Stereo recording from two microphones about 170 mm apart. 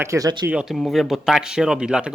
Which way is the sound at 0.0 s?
20° right (ahead or behind).